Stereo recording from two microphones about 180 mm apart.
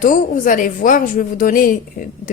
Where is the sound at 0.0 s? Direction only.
45° left (ahead or behind).